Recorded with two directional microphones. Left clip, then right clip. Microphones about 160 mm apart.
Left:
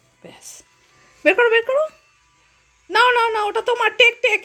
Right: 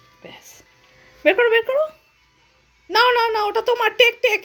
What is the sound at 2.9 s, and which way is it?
Speech, 5° left (ahead or behind).